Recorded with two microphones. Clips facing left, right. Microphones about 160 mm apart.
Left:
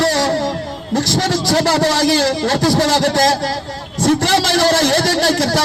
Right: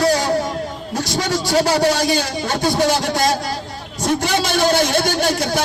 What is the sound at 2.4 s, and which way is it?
A man's voice, 90° left.